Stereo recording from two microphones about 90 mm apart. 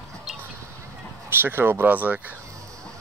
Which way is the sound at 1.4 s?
25° right (ahead or behind).